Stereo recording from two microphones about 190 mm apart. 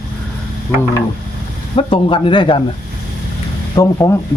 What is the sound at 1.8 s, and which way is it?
Speech, 25° left (ahead or behind).